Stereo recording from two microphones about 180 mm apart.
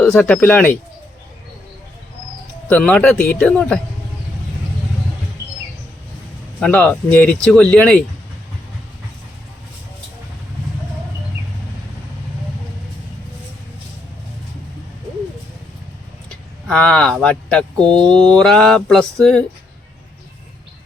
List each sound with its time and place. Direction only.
0.0 s speech: 10° left (ahead or behind)
2.6 s speech: 5° left (ahead or behind)
6.6 s speech: 5° left (ahead or behind)
16.6 s speech: 5° left (ahead or behind)
17.7 s speech: 25° right (ahead or behind)
18.1 s speech: 5° left (ahead or behind)